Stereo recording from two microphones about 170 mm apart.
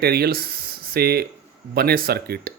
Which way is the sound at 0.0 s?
65° right (ahead or behind).